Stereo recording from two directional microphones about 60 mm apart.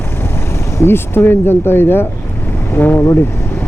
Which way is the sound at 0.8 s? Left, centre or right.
Left.